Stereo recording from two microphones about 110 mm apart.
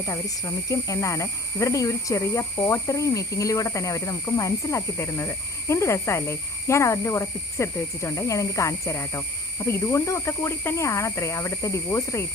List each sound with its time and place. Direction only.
0.0 s speech: 30° left (ahead or behind)